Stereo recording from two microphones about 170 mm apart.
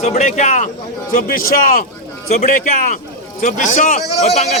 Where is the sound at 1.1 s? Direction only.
55° left (ahead or behind).